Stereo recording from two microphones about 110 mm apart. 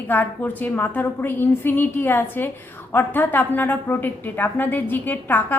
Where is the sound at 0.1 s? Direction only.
15° left (ahead or behind).